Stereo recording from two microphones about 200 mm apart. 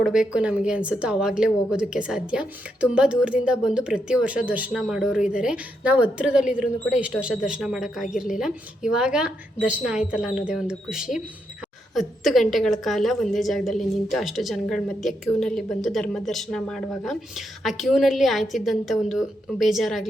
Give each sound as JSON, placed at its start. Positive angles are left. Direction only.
{"t": 0.0, "sound": "speech", "side_deg": -5}